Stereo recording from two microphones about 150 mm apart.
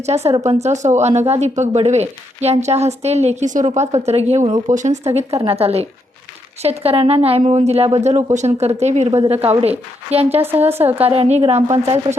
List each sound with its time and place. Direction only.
0.0 s a woman's voice: 45° right (ahead or behind)
10.4 s speech: 15° right (ahead or behind)
11.0 s a woman's voice: 40° right (ahead or behind)